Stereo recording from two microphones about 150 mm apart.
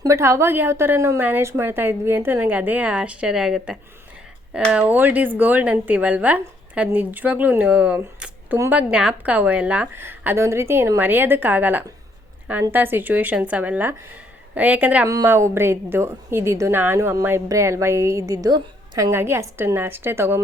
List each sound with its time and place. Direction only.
0.0 s a woman's voice: 20° right (ahead or behind)